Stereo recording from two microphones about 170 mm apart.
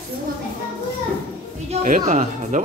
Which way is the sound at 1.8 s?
50° right (ahead or behind).